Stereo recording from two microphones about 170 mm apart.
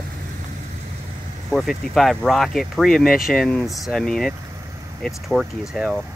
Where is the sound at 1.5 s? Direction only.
Centre (ahead or behind).